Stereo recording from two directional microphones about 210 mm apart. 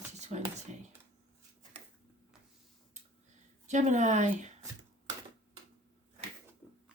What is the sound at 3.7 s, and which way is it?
Speech, 35° right (ahead or behind).